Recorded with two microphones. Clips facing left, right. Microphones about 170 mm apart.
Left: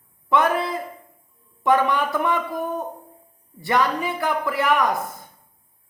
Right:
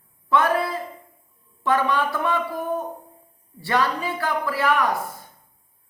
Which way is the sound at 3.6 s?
15° left (ahead or behind).